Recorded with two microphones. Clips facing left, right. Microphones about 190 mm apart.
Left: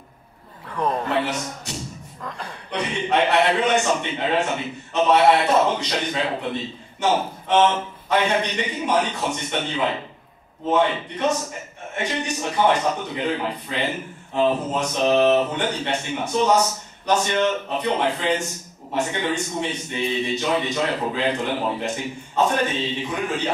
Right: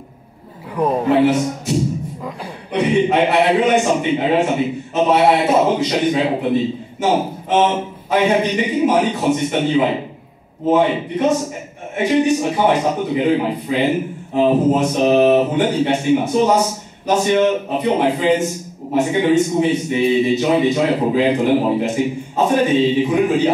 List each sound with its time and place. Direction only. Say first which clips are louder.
0.7 s a man's voice: right 8 dB; 10° right (ahead or behind)
14.8 s mantra: right 6 dB; 25° right (ahead or behind)
15.1 s a man's voice: right 5 dB; 10° right (ahead or behind)